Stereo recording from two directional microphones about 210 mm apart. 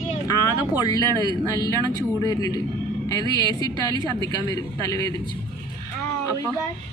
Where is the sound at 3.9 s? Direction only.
20° right (ahead or behind).